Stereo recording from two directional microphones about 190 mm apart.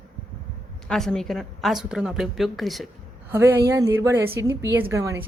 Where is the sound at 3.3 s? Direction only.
10° right (ahead or behind).